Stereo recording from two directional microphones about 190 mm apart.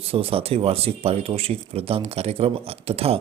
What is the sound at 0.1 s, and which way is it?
Speech, 30° right (ahead or behind).